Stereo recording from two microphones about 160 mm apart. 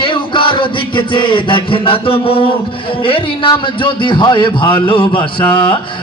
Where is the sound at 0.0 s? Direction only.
30° left (ahead or behind).